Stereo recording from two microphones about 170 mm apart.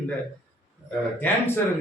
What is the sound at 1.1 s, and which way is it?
Speech, 10° left (ahead or behind).